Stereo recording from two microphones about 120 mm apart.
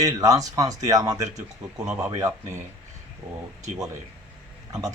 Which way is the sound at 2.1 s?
25° right (ahead or behind).